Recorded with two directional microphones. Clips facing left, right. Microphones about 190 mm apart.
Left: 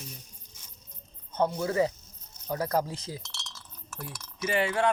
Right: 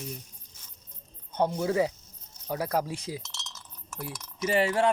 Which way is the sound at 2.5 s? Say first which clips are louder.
Even; 10° right (ahead or behind).